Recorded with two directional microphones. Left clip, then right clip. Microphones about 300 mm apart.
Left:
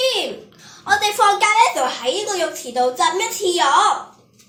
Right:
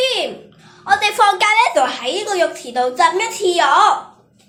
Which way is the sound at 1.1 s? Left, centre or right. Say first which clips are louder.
Even; right.